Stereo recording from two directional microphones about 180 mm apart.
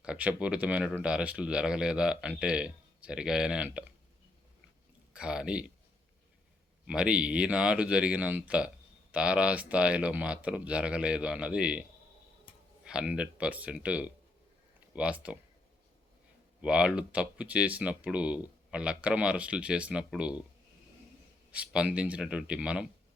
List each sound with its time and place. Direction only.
0.0 s speech: 5° right (ahead or behind)
5.1 s speech: 5° right (ahead or behind)
6.8 s speech: 5° right (ahead or behind)
12.8 s speech: 5° right (ahead or behind)
16.6 s speech: 5° right (ahead or behind)
21.5 s speech: 5° right (ahead or behind)